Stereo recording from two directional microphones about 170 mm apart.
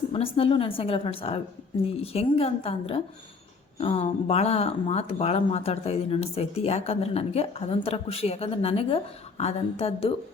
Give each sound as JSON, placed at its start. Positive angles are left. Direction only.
{"t": 0.1, "sound": "speech", "side_deg": 35}